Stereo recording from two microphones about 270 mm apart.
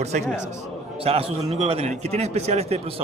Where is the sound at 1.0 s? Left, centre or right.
Right.